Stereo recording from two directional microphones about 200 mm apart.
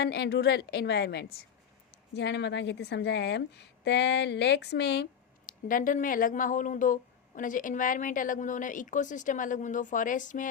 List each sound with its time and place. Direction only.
0.0 s a woman's voice: 55° left (ahead or behind)
5.5 s speech: 45° left (ahead or behind)